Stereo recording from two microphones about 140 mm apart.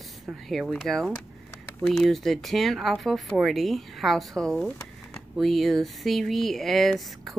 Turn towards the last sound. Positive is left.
turn(degrees=0)  # may be behind; listen again after turning